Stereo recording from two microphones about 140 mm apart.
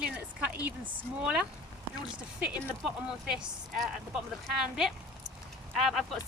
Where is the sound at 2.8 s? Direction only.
5° right (ahead or behind).